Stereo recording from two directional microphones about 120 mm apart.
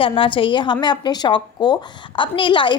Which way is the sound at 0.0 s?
45° left (ahead or behind).